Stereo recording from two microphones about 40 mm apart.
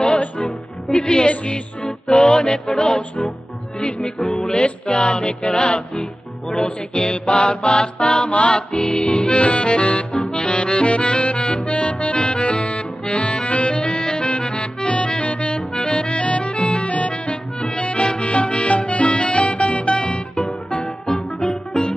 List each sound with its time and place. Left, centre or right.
0.4 s music: centre